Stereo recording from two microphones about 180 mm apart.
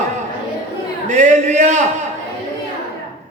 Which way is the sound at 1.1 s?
40° right (ahead or behind).